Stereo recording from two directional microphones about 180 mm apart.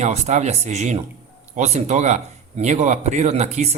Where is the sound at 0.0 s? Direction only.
40° right (ahead or behind).